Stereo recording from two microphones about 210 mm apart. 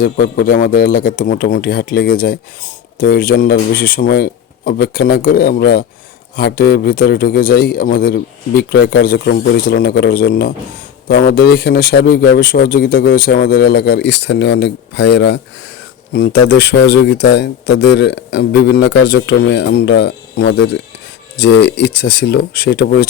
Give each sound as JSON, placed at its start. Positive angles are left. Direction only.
{"t": 0.0, "sound": "a man's voice", "side_deg": 40}